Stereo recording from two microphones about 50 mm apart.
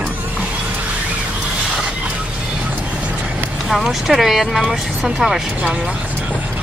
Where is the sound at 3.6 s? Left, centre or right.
Centre.